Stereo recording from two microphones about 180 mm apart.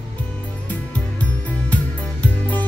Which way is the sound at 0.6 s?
10° left (ahead or behind).